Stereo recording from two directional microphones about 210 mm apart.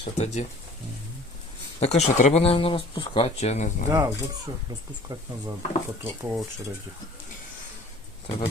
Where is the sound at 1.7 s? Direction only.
30° left (ahead or behind).